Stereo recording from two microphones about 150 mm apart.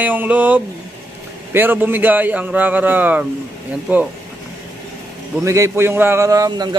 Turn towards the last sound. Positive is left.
turn(degrees=-25)  # may be behind; listen again after turning